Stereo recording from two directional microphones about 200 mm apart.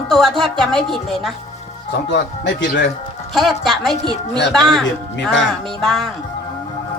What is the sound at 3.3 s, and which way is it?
A woman's voice, centre (ahead or behind).